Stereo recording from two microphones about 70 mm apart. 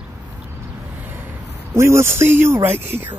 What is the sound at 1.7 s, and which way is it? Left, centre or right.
Speech, right.